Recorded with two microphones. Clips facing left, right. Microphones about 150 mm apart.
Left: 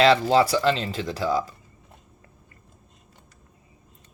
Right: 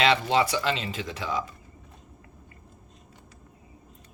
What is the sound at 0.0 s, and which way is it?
Speech, 35° left (ahead or behind).